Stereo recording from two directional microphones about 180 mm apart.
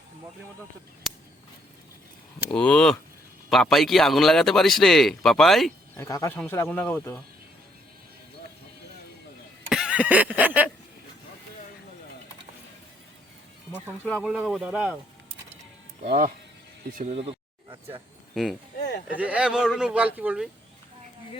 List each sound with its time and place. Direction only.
2.5 s a man's voice: 5° left (ahead or behind)
6.0 s speech: 15° left (ahead or behind)
9.6 s a sound: 5° right (ahead or behind)
13.7 s speech: 10° left (ahead or behind)
14.2 s a man's voice: 5° right (ahead or behind)
16.0 s speech: 50° right (ahead or behind)
17.0 s a sound: 30° right (ahead or behind)
18.4 s a man's voice: centre (ahead or behind)